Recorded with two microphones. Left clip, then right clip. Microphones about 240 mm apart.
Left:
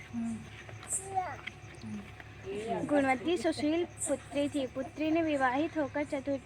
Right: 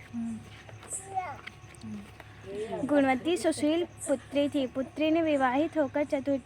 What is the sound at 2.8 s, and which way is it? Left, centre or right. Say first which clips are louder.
A woman's voice: right 4 dB; right.